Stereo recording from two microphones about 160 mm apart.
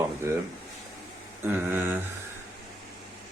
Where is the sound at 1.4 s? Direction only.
10° right (ahead or behind).